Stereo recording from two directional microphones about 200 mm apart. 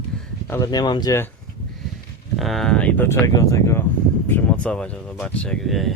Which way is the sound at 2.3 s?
Centre (ahead or behind).